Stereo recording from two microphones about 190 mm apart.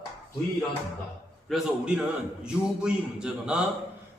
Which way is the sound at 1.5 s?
5° right (ahead or behind).